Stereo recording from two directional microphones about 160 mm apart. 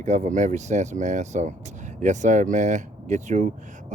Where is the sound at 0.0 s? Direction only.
50° right (ahead or behind).